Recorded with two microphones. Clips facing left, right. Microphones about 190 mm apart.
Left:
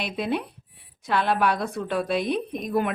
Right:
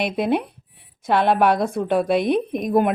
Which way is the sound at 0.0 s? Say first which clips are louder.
Right 6 dB; 55° right (ahead or behind).